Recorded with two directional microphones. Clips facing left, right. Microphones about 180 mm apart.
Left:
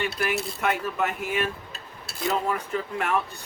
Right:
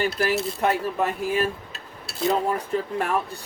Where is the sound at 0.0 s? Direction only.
35° right (ahead or behind).